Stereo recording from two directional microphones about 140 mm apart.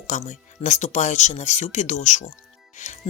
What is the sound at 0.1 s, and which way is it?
Speech, 55° left (ahead or behind).